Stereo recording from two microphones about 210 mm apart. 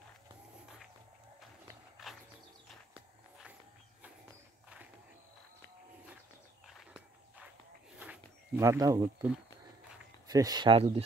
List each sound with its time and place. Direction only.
2.0 s bird: centre (ahead or behind)
8.0 s a sound: 10° right (ahead or behind)
10.2 s speech: 20° right (ahead or behind)